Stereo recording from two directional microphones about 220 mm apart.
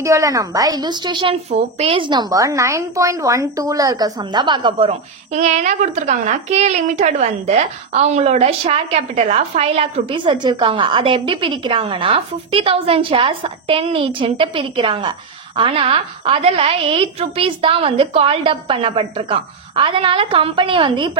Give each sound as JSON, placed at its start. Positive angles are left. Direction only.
{"t": 0.0, "sound": "a woman's voice", "side_deg": -15}